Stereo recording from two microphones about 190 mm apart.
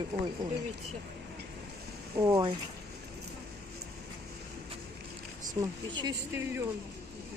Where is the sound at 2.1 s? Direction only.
20° right (ahead or behind).